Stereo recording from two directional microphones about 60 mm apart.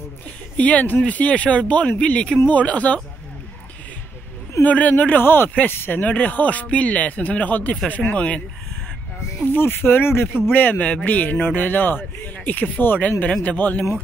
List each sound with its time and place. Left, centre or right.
0.6 s speech: left
4.6 s speech: left
5.2 s speech: left
9.5 s speech: left